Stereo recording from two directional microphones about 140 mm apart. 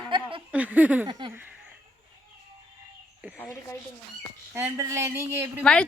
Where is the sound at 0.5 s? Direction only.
10° right (ahead or behind).